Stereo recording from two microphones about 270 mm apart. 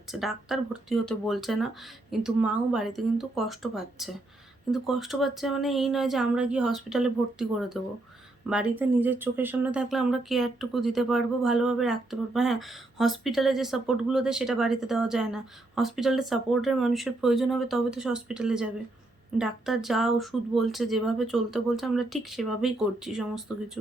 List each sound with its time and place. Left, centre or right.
0.1 s speech: centre